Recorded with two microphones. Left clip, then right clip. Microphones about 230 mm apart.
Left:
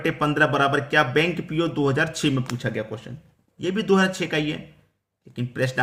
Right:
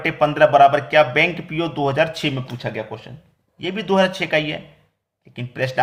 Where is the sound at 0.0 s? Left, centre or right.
Centre.